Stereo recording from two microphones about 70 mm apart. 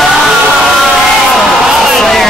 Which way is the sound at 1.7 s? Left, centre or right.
Centre.